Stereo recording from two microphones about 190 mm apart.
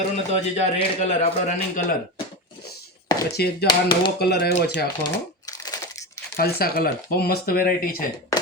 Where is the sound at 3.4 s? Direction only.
55° left (ahead or behind).